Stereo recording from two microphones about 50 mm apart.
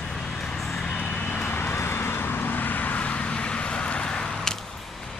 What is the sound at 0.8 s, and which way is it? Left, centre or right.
Vehicle, centre.